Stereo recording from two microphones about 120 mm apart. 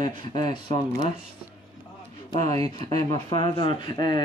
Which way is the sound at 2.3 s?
65° right (ahead or behind).